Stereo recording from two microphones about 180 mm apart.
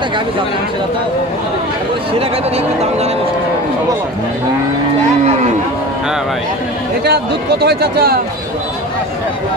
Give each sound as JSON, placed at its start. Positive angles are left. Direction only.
{"t": 2.1, "sound": "speech", "side_deg": -35}
{"t": 7.1, "sound": "speech", "side_deg": -65}